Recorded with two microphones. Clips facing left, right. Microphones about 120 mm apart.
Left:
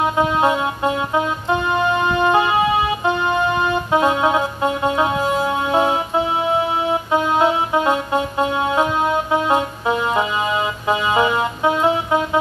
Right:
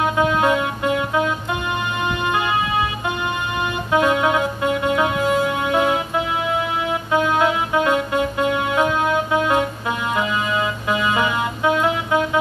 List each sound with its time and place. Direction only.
0.0 s music: 30° left (ahead or behind)